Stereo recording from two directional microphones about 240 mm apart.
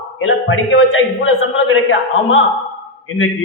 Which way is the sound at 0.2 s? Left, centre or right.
Left.